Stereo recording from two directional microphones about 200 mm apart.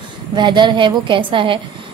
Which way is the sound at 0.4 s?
20° right (ahead or behind).